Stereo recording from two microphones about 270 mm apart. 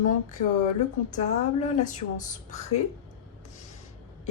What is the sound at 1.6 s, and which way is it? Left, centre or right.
Speech, left.